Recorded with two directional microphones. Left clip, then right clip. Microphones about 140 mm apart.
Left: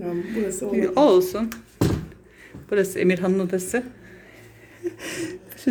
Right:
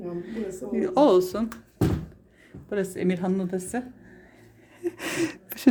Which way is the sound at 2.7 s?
20° right (ahead or behind).